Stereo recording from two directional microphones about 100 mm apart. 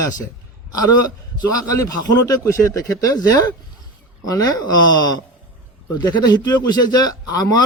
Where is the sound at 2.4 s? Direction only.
30° left (ahead or behind).